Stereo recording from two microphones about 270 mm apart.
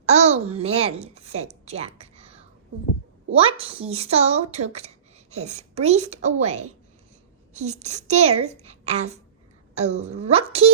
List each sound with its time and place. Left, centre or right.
0.0 s a child's voice: right